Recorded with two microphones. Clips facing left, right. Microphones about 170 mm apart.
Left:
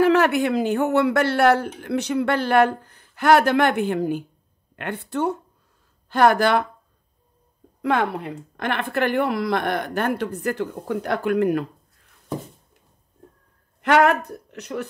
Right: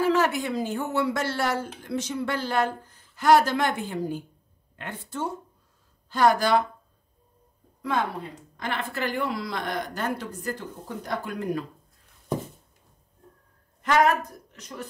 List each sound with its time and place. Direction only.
0.0 s speech: 65° left (ahead or behind)
7.8 s speech: 65° left (ahead or behind)
13.8 s speech: 65° left (ahead or behind)